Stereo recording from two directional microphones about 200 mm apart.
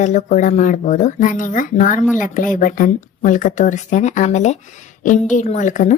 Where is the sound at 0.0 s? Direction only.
35° left (ahead or behind).